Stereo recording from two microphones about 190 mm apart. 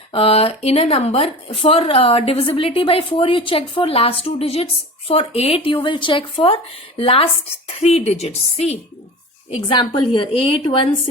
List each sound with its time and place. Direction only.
0.1 s a woman's voice: 30° left (ahead or behind)